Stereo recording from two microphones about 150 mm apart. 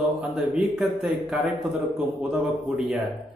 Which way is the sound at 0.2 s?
5° right (ahead or behind).